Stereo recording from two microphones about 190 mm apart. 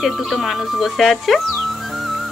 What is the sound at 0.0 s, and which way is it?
Music, centre (ahead or behind).